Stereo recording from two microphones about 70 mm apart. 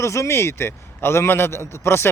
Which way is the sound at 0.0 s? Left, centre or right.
Left.